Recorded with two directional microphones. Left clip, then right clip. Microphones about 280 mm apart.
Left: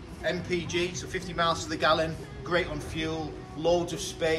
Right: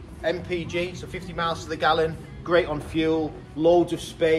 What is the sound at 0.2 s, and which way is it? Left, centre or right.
A man's voice, centre.